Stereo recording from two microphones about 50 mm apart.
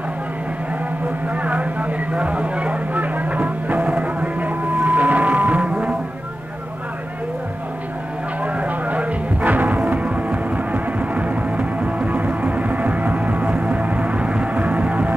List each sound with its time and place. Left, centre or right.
1.3 s a sound: right
4.8 s music: right
8.4 s music: right